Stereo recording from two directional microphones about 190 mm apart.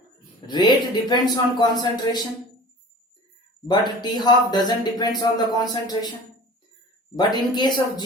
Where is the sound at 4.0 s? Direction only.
20° left (ahead or behind).